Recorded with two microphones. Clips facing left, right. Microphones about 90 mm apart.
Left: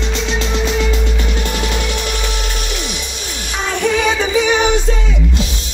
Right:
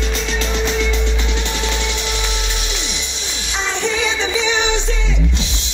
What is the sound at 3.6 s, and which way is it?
Music, 50° left (ahead or behind).